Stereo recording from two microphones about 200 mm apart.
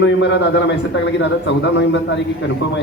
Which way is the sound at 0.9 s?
60° left (ahead or behind).